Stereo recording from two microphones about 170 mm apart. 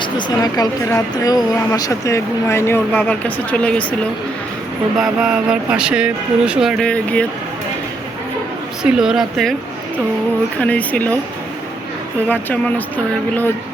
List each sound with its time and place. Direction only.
0.0 s speech: 25° left (ahead or behind); by 3.8 s 5° left (ahead or behind)
4.9 s speech: 5° right (ahead or behind)
8.8 s speech: 5° right (ahead or behind)
10.6 s speech: 10° left (ahead or behind)
12.3 s speech: 10° left (ahead or behind)